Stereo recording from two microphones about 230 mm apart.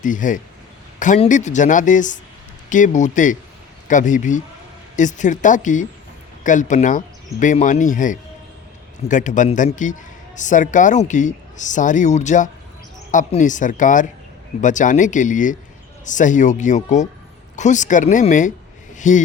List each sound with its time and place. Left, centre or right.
0.0 s a man's voice: left